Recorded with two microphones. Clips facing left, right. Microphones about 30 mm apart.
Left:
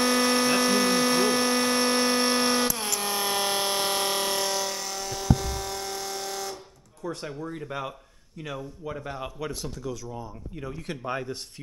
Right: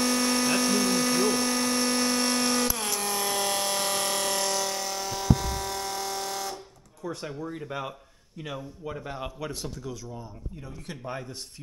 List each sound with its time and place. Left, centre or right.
0.0 s a sound: left; by 7.1 s centre
7.1 s speech: centre
10.6 s speech: centre